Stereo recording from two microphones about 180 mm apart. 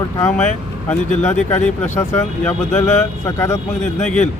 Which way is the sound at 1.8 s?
40° left (ahead or behind).